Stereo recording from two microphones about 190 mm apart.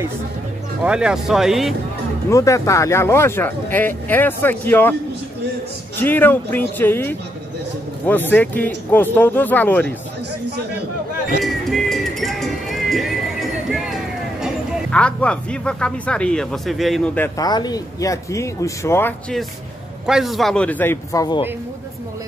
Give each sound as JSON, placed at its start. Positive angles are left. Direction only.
{"t": 0.8, "sound": "speech", "side_deg": -5}
{"t": 2.2, "sound": "speech", "side_deg": 15}
{"t": 5.9, "sound": "speech", "side_deg": 10}
{"t": 11.4, "sound": "music", "side_deg": 0}
{"t": 17.4, "sound": "speech", "side_deg": 20}
{"t": 20.1, "sound": "speech", "side_deg": 0}